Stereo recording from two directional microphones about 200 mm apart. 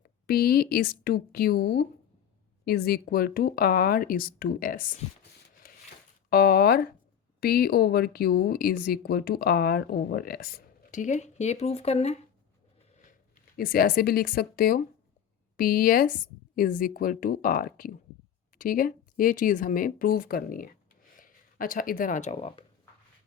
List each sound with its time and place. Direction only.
0.0 s speech: 50° left (ahead or behind)
5.6 s a sound: 45° left (ahead or behind)
6.3 s speech: 50° left (ahead or behind); by 12.2 s 30° left (ahead or behind)
13.6 s speech: 45° left (ahead or behind); by 22.6 s 30° left (ahead or behind)